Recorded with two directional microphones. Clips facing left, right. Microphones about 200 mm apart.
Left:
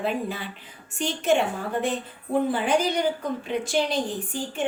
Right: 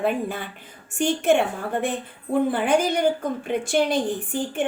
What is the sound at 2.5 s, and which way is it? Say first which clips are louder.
A woman's voice: right 2 dB; 50° right (ahead or behind).